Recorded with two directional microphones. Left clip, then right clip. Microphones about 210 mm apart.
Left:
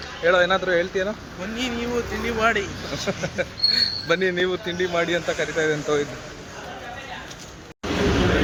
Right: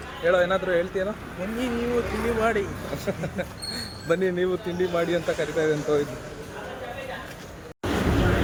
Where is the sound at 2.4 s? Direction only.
10° right (ahead or behind).